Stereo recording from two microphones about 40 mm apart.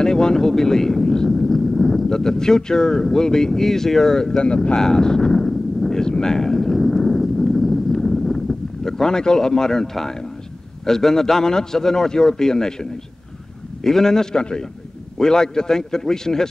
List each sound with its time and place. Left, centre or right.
0.0 s a man's voice: centre
4.4 s speech: left
4.7 s a sound: centre
10.9 s a man's voice: centre
13.8 s a man's voice: centre